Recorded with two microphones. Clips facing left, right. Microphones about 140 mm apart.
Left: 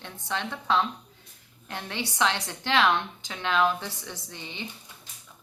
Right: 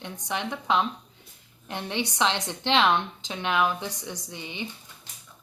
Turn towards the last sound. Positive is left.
turn(degrees=-15)  # may be behind; listen again after turning